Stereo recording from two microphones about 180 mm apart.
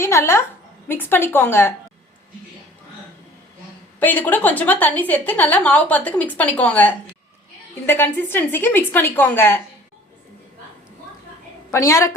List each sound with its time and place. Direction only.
0.0 s a woman's voice: 15° left (ahead or behind)
4.0 s a woman's voice: 10° left (ahead or behind)
11.7 s a woman's voice: 15° left (ahead or behind)